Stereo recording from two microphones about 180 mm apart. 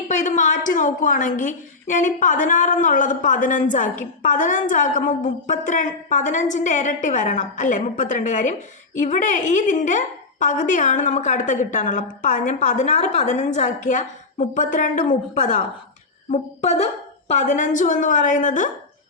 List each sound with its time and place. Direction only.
0.1 s a woman's voice: 40° left (ahead or behind)